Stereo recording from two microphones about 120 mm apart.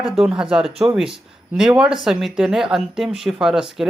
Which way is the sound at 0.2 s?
5° right (ahead or behind).